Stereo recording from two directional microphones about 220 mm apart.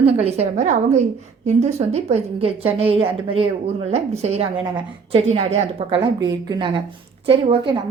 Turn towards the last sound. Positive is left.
turn(degrees=-25)  # may be behind; listen again after turning